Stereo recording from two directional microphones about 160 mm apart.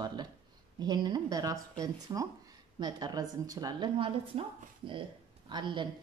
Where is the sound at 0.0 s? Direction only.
25° right (ahead or behind).